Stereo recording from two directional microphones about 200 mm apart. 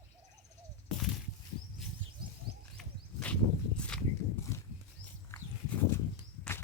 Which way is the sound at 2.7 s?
5° left (ahead or behind).